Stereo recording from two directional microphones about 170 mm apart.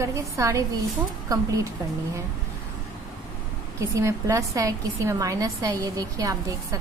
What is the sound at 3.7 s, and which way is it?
A woman's voice, 20° right (ahead or behind).